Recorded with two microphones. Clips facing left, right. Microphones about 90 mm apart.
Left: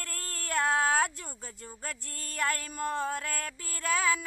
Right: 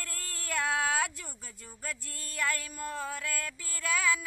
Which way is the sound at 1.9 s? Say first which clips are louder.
Right 4 dB; 45° left (ahead or behind).